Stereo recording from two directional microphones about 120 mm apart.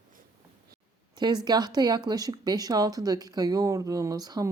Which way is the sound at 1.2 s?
35° right (ahead or behind).